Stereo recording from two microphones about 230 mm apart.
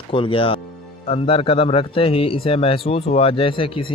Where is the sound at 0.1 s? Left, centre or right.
Left.